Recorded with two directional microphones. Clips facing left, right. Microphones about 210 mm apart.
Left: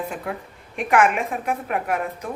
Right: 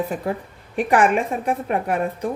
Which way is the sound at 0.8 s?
35° right (ahead or behind).